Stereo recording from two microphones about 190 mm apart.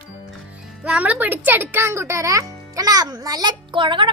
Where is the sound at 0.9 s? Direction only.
5° right (ahead or behind).